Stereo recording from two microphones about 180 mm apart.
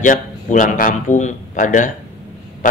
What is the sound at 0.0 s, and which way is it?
Speech, 45° left (ahead or behind).